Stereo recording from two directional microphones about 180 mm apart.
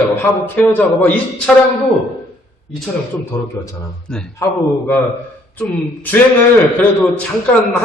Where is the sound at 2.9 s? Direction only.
Centre (ahead or behind).